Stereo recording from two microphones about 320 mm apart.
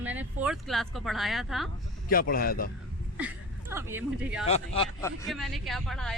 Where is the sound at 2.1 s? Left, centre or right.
Left.